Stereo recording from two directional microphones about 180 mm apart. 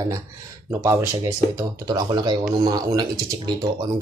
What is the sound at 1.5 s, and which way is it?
Speech, 20° right (ahead or behind).